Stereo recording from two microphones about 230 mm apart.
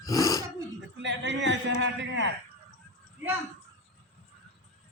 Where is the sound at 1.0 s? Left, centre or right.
Right.